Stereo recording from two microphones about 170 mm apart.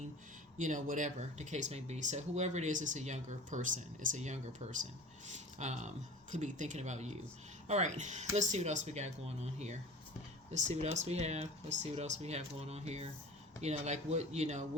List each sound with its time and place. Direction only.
0.6 s speech: 50° right (ahead or behind)